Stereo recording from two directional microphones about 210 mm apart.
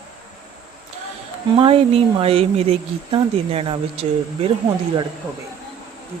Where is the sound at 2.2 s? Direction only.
25° right (ahead or behind).